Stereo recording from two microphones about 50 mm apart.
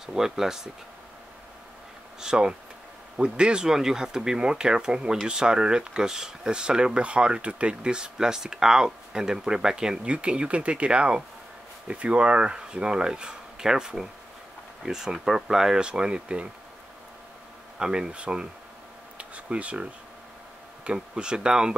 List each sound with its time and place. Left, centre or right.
0.0 s speech: centre
2.1 s speech: centre
17.7 s speech: centre
19.1 s a sound: right
20.8 s speech: centre